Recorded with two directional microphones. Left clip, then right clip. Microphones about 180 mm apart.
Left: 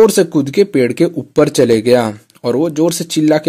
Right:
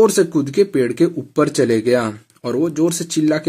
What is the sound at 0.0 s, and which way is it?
Speech, 30° left (ahead or behind).